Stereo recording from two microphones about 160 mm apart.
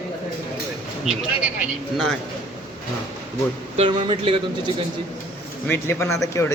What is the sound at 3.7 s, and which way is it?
Speech, 35° right (ahead or behind).